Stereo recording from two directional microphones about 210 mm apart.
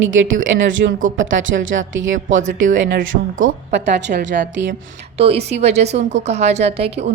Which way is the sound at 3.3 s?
60° right (ahead or behind).